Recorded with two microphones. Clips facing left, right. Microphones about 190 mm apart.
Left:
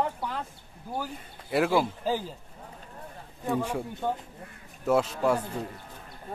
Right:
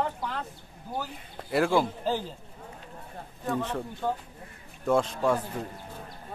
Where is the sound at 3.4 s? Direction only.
10° left (ahead or behind).